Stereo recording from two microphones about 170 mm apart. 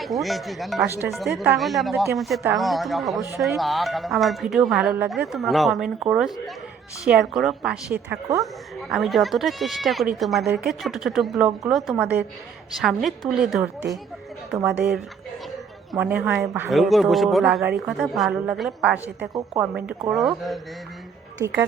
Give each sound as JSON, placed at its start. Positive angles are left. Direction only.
{"t": 0.0, "sound": "a woman's voice", "side_deg": 0}
{"t": 15.9, "sound": "a woman's voice", "side_deg": -10}
{"t": 16.6, "sound": "speech", "side_deg": 0}
{"t": 19.2, "sound": "a woman's voice", "side_deg": -20}
{"t": 19.7, "sound": "speech", "side_deg": -5}
{"t": 21.4, "sound": "a woman's voice", "side_deg": -10}